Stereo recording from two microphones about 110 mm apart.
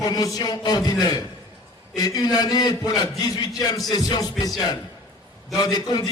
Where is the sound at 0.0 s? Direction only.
35° left (ahead or behind).